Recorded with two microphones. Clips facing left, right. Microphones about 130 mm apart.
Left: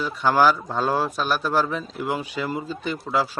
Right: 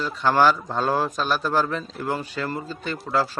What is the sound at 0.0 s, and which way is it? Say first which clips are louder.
A man's voice: even; 10° left (ahead or behind).